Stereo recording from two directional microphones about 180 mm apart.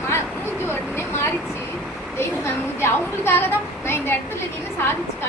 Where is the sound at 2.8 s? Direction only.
15° left (ahead or behind).